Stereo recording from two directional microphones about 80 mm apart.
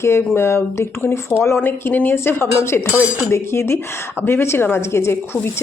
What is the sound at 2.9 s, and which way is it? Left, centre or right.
Cutlery, centre.